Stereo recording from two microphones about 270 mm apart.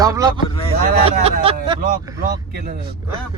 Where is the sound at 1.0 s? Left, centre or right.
Right.